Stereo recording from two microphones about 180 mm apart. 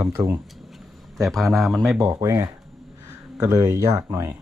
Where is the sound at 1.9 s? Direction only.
20° right (ahead or behind).